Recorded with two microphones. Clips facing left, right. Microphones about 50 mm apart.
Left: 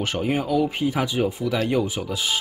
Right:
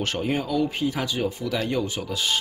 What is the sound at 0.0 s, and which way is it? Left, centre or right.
Speech, centre.